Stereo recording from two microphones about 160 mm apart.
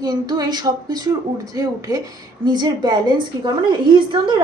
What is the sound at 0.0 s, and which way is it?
A woman's voice, 25° right (ahead or behind).